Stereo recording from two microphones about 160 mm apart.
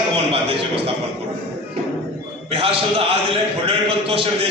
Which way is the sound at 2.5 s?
35° right (ahead or behind).